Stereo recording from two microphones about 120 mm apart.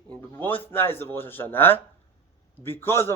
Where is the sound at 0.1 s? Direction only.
15° left (ahead or behind).